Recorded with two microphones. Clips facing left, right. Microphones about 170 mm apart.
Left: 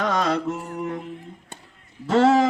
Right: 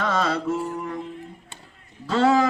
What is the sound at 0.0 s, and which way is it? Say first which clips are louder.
Music: left 1 dB; 15° left (ahead or behind).